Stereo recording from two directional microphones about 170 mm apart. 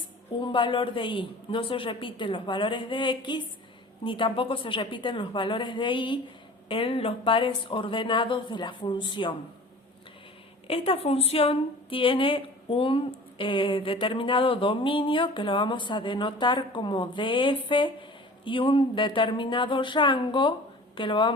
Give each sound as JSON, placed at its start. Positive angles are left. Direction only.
{"t": 0.4, "sound": "a man's voice", "side_deg": 30}
{"t": 10.7, "sound": "a woman's voice", "side_deg": 35}